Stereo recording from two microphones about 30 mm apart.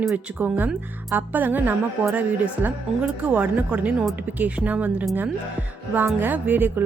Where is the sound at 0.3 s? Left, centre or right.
Right.